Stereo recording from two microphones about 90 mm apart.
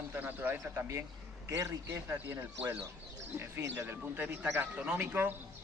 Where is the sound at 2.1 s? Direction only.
25° right (ahead or behind).